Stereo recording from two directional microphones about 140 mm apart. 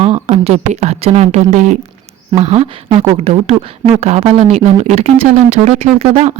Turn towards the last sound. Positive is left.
turn(degrees=-45)  # may be behind; listen again after turning